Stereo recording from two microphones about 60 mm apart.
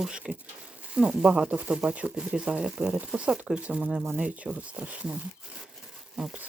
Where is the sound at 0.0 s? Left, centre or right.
Centre.